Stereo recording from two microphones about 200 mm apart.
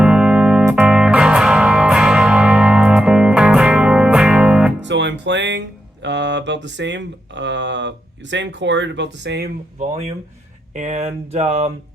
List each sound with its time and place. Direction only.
0.0 s music: 5° right (ahead or behind)
4.8 s speech: 60° right (ahead or behind)
10.8 s speech: 35° right (ahead or behind)